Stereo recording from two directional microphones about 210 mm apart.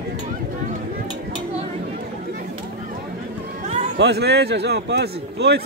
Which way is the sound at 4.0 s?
50° right (ahead or behind).